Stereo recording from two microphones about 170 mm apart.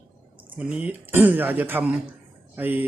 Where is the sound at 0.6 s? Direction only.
5° right (ahead or behind).